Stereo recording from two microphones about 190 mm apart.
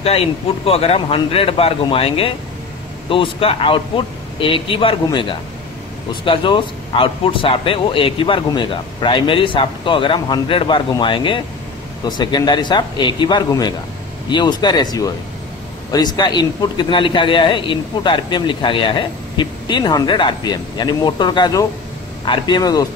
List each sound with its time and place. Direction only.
0.7 s a man's voice: 30° left (ahead or behind)